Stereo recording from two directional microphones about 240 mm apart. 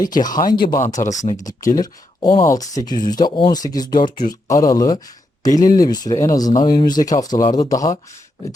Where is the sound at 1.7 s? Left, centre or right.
Centre.